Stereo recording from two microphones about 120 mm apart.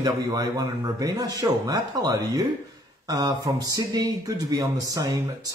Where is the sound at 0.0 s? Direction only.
30° right (ahead or behind).